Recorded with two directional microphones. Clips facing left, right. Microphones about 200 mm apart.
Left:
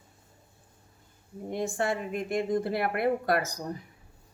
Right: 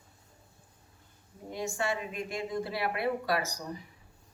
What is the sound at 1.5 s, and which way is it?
A woman's voice, 55° left (ahead or behind).